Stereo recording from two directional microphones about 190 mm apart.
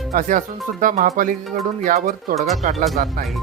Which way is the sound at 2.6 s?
40° right (ahead or behind).